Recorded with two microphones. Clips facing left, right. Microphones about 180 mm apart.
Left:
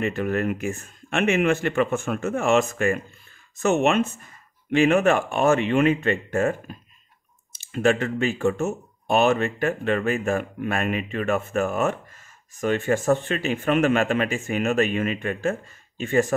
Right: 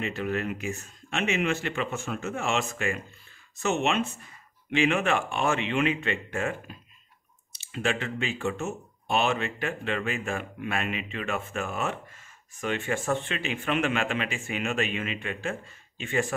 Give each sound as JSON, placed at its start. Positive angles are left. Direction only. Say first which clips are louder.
{"t": 0.0, "sound": "speech", "louder": "left 6 dB", "side_deg": 50}